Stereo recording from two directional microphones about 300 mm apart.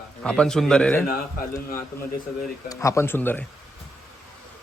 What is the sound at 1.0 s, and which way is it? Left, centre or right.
Speech, left.